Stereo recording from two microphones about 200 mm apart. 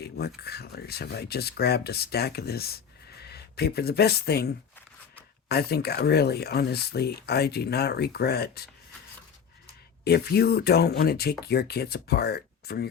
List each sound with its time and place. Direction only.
0.0 s speech: 55° left (ahead or behind)
10.0 s speech: 50° left (ahead or behind)